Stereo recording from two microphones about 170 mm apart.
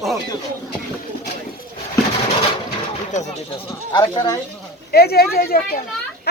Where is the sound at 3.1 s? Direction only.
45° left (ahead or behind).